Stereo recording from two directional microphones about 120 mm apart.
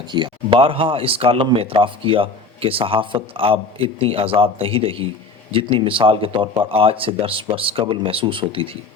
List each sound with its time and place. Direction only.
0.1 s speech: 40° right (ahead or behind)